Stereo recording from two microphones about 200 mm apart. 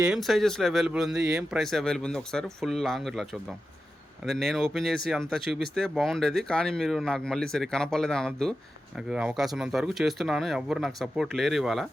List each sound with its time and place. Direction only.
0.0 s speech: centre (ahead or behind)
4.3 s speech: centre (ahead or behind)